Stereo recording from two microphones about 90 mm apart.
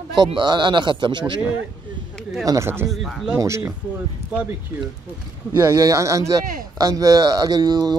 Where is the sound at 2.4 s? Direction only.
40° right (ahead or behind).